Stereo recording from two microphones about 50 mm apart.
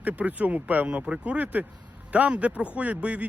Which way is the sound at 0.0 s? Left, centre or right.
Right.